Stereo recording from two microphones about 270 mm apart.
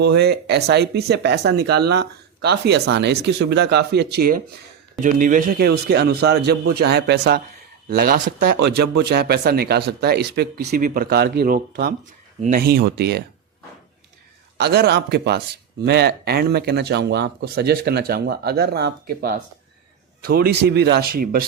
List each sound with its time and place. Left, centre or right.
0.0 s speech: right
14.6 s speech: right
20.2 s speech: right